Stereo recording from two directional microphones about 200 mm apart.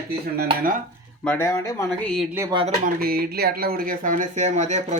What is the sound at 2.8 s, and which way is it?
Speech, 50° right (ahead or behind).